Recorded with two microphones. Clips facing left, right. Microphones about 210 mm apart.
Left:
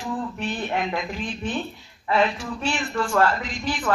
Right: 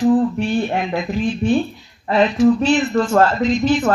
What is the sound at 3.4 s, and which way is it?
Speech, 25° right (ahead or behind).